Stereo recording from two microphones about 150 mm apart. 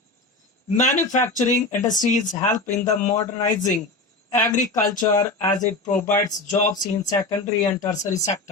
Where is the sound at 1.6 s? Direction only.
15° left (ahead or behind).